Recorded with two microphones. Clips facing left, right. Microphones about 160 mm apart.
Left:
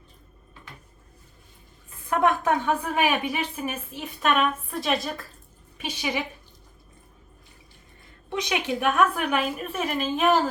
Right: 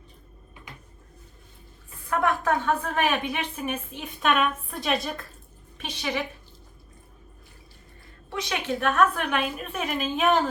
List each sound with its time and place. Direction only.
2.0 s a woman's voice: 20° left (ahead or behind)
8.3 s a woman's voice: 20° left (ahead or behind); by 10.5 s centre (ahead or behind)